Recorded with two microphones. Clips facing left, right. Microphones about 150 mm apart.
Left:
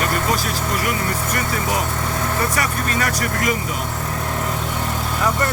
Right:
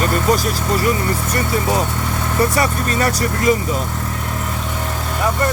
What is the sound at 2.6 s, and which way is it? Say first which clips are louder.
Speech: right 4 dB; 30° right (ahead or behind).